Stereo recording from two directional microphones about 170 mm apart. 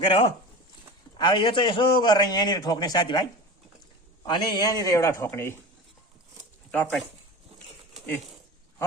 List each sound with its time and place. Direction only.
0.0 s a man's voice: 30° left (ahead or behind)
4.3 s a man's voice: 25° left (ahead or behind)